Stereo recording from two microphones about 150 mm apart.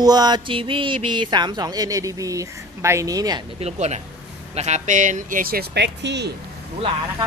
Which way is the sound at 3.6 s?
45° right (ahead or behind).